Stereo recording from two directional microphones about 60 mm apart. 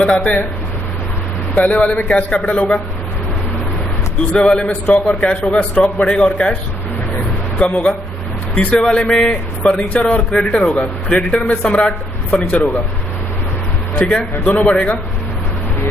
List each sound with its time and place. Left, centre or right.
0.0 s a man's voice: centre
1.5 s a man's voice: left
4.4 s a man's voice: centre
7.6 s a man's voice: left
13.9 s a man's voice: centre